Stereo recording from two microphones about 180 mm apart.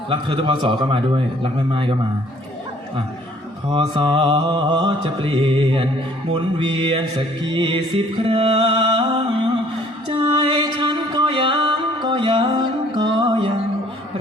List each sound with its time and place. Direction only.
0.1 s music: 30° right (ahead or behind)
3.7 s music: 30° right (ahead or behind)